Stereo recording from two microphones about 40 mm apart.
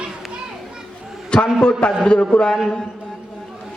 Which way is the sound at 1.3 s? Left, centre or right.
Left.